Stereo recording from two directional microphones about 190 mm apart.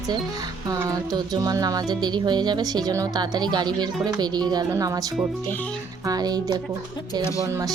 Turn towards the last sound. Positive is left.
turn(degrees=-20)  # may be behind; listen again after turning